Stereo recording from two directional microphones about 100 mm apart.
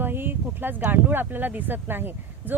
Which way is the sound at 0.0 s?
20° right (ahead or behind).